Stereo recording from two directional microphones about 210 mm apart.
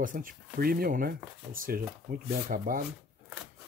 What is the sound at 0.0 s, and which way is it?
Speech, 40° right (ahead or behind).